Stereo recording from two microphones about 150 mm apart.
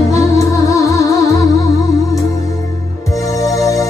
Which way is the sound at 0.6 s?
20° left (ahead or behind).